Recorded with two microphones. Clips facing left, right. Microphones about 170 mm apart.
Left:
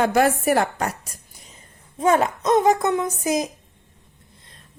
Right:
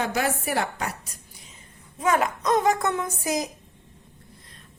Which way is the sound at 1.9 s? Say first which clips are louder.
Left 4 dB; 30° left (ahead or behind).